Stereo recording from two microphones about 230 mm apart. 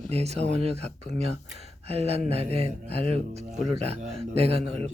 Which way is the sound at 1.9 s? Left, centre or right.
Right.